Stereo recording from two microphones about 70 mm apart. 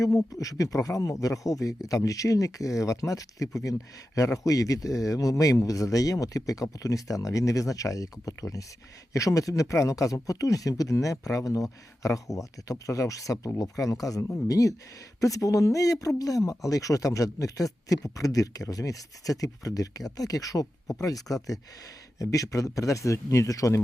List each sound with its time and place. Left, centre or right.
0.0 s speech: left